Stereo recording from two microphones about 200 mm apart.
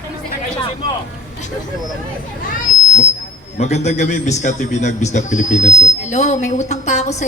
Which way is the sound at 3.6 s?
35° left (ahead or behind).